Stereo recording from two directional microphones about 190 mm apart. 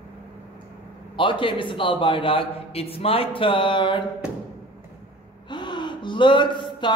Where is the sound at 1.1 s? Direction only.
25° left (ahead or behind).